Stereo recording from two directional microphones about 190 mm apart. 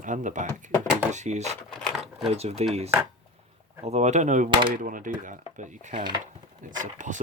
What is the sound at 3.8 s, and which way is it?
Speech, 35° right (ahead or behind).